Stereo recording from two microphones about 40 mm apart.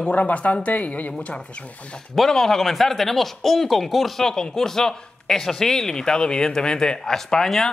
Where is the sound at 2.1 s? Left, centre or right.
Centre.